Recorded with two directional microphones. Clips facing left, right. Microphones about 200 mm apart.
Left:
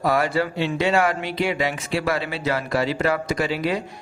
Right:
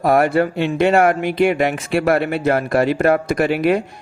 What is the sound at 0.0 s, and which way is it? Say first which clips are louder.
Speech: right 6 dB; 55° right (ahead or behind).